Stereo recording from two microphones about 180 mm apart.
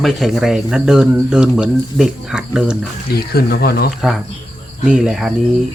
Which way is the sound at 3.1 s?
60° left (ahead or behind).